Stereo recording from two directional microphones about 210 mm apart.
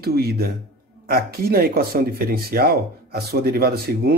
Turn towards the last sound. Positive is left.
turn(degrees=-50)  # may be behind; listen again after turning